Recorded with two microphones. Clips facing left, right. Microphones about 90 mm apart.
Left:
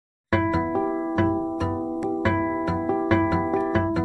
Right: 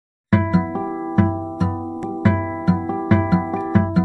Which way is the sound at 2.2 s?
15° right (ahead or behind).